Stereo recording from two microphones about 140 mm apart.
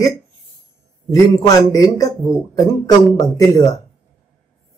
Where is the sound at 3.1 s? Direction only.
30° left (ahead or behind).